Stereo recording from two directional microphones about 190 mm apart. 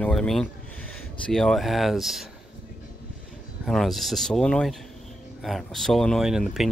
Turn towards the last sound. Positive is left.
turn(degrees=0)  # may be behind; listen again after turning